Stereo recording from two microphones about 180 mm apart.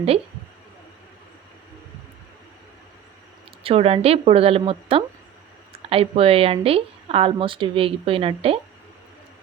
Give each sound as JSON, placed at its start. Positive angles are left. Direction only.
{"t": 3.6, "sound": "speech", "side_deg": -30}